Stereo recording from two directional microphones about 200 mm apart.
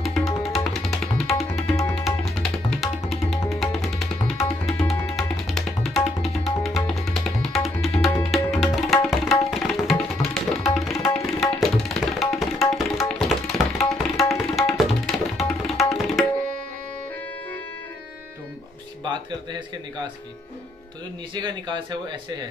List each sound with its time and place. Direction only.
0.0 s tabla: centre (ahead or behind)
21.4 s speech: 25° right (ahead or behind)